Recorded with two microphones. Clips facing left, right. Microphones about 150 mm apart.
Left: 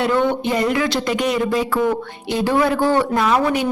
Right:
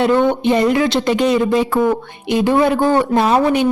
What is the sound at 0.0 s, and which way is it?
A woman's voice, 20° right (ahead or behind).